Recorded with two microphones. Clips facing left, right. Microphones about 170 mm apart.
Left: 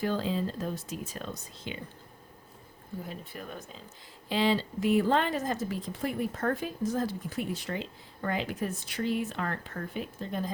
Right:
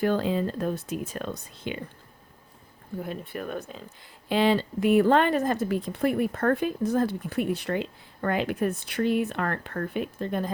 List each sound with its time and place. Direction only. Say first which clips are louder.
0.0 s speech: right 5 dB; 60° right (ahead or behind)
3.0 s speech: right 9 dB; 65° right (ahead or behind)